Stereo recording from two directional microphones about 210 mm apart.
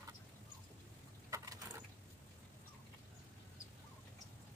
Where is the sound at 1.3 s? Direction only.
15° right (ahead or behind).